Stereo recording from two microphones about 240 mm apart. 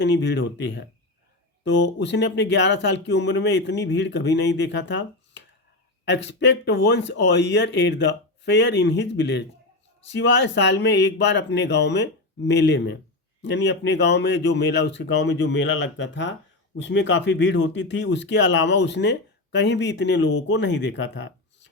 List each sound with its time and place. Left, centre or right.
0.3 s speech: left
6.7 s speech: left